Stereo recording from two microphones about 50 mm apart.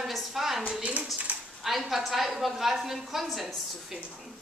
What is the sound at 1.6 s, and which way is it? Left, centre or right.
A woman's voice, centre.